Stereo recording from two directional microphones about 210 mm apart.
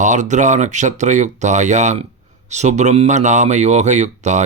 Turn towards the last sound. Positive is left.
turn(degrees=-35)  # may be behind; listen again after turning